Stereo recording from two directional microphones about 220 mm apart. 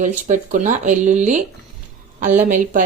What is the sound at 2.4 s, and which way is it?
Speech, 35° right (ahead or behind).